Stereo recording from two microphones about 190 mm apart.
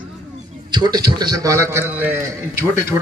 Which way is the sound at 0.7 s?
20° right (ahead or behind).